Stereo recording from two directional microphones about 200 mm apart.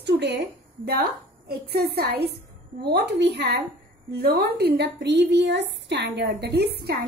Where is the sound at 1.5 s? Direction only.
50° right (ahead or behind).